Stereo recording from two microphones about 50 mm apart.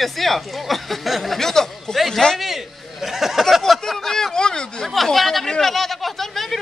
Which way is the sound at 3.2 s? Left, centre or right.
Centre.